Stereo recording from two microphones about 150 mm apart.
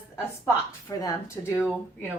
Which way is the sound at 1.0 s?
25° left (ahead or behind).